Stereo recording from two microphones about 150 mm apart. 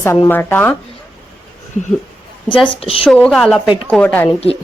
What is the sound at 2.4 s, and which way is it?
Speech, 35° left (ahead or behind).